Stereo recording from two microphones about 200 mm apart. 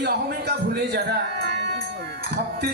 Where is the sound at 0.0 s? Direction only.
55° right (ahead or behind).